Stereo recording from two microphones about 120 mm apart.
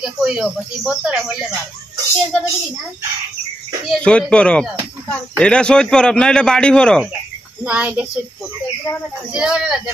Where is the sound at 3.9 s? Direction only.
10° left (ahead or behind).